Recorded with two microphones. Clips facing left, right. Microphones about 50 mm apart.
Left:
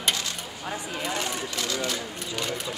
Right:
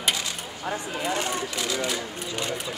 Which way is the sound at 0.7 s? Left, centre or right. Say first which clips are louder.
Right 3 dB; centre.